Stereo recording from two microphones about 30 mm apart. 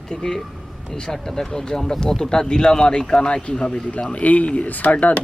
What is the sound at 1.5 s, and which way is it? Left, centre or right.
Speech, left.